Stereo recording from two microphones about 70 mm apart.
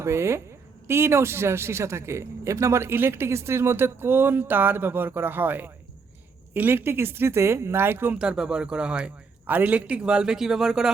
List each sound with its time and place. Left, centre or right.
0.0 s speech: right
8.2 s speech: centre
9.5 s speech: right; by 10.9 s centre